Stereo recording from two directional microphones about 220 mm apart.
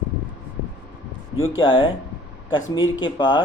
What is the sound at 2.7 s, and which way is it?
Speech, 60° left (ahead or behind).